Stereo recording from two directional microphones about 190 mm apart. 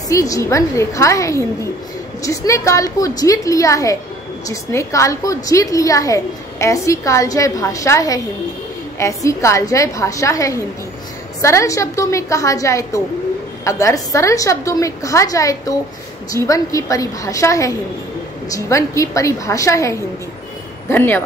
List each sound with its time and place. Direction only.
0.1 s a woman's voice: 15° left (ahead or behind)